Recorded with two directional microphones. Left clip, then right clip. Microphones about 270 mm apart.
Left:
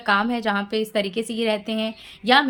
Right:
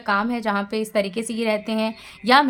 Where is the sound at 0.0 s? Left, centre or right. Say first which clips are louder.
Left 1 dB; centre.